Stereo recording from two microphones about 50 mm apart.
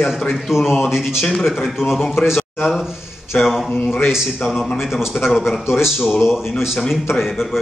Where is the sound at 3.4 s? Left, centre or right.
Centre.